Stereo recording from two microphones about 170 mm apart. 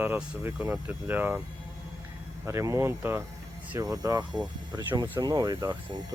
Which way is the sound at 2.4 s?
15° right (ahead or behind).